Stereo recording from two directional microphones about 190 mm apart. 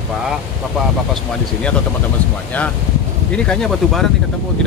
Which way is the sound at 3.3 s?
5° left (ahead or behind).